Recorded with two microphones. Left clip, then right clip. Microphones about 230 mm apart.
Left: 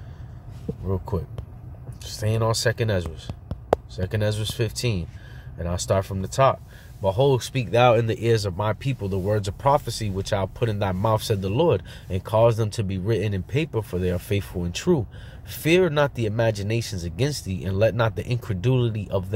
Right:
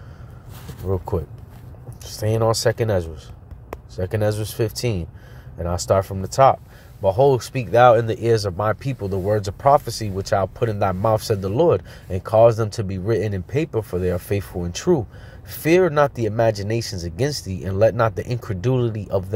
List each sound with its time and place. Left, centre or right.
0.8 s speech: centre
2.2 s speech: centre